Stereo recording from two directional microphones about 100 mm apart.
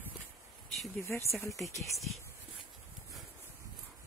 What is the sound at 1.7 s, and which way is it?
Speech, 30° left (ahead or behind).